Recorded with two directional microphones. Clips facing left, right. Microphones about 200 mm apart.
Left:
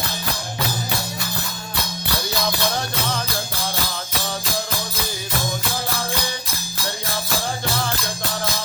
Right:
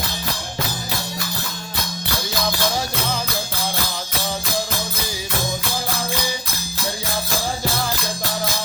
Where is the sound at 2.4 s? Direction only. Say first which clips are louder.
Right 3 dB; 5° right (ahead or behind).